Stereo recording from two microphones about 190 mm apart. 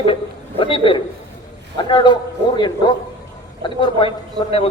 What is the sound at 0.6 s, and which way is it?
A woman's voice, 25° left (ahead or behind).